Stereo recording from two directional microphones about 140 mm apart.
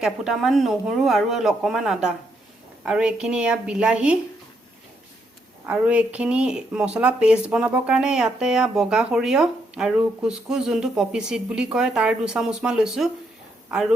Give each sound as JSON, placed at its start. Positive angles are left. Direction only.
{"t": 0.0, "sound": "a woman's voice", "side_deg": 0}
{"t": 5.6, "sound": "speech", "side_deg": -10}